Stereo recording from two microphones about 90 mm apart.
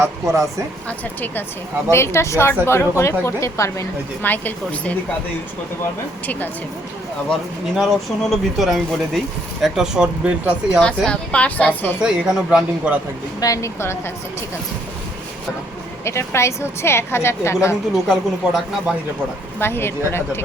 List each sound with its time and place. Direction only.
0.9 s speech: 20° left (ahead or behind)
1.9 s a woman's voice: 30° left (ahead or behind)
4.2 s speech: 20° left (ahead or behind)
7.8 s speech: centre (ahead or behind)
10.8 s speech: 10° left (ahead or behind)
11.9 s speech: 10° right (ahead or behind)
13.4 s a woman's voice: 35° left (ahead or behind)
16.0 s a woman's voice: 30° left (ahead or behind)
18.1 s speech: 5° right (ahead or behind)
19.5 s speech: 25° left (ahead or behind)